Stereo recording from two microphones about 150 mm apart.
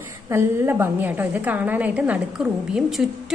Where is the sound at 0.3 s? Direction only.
15° right (ahead or behind).